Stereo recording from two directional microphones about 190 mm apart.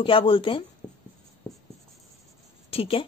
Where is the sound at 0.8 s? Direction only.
10° left (ahead or behind).